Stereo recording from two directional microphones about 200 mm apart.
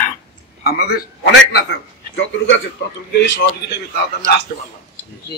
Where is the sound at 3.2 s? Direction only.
65° left (ahead or behind).